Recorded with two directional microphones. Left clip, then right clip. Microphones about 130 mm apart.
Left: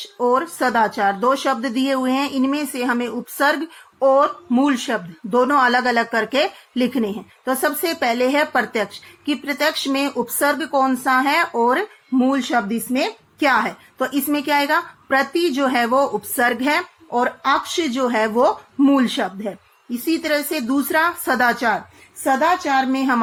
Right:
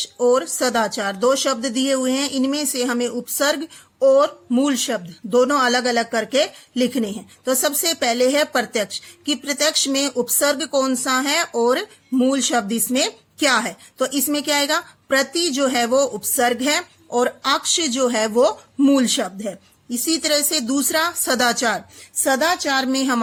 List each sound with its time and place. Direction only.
0.2 s speech: 40° right (ahead or behind)
22.2 s a woman's voice: 80° right; by 23.2 s 55° right (ahead or behind)